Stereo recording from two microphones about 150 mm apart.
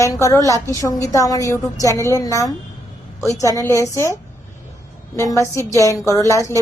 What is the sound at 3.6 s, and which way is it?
Speech, 20° left (ahead or behind).